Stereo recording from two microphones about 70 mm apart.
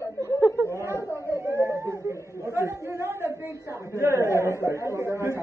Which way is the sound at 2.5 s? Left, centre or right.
Right.